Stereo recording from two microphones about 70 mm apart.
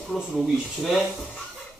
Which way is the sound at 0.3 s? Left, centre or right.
Centre.